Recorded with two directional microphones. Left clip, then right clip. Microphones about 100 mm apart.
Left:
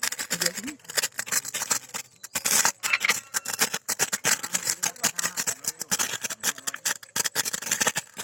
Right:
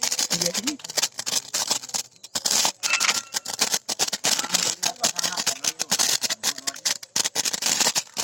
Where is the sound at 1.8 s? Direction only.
50° right (ahead or behind).